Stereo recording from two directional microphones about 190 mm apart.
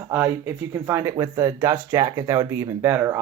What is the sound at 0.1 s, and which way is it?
Speech, 10° right (ahead or behind).